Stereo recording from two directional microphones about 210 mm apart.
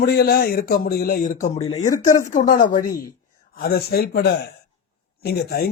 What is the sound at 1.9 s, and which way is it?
Speech, 15° left (ahead or behind).